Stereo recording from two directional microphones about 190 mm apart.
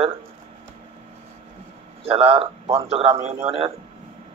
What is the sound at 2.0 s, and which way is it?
A man's voice, 30° right (ahead or behind).